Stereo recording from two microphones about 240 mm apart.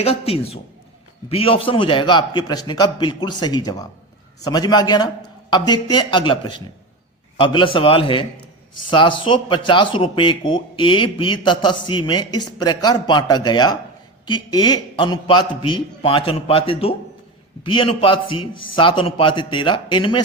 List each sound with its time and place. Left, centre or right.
0.0 s a man's voice: left